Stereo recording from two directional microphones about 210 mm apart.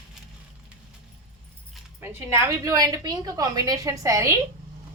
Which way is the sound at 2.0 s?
10° right (ahead or behind).